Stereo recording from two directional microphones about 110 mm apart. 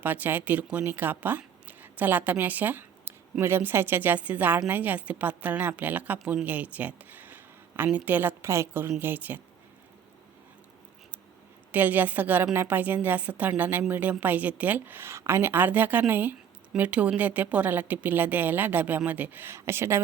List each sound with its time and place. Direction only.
0.0 s a woman's voice: 15° right (ahead or behind)
11.7 s a woman's voice: 15° right (ahead or behind)